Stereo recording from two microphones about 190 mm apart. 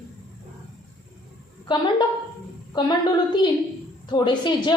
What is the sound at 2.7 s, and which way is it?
A woman's voice, 20° left (ahead or behind).